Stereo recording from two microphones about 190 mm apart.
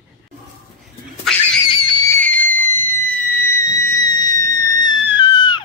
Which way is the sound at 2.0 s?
10° left (ahead or behind).